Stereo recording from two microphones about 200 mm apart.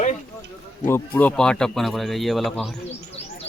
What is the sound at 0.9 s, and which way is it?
Speech, 10° left (ahead or behind).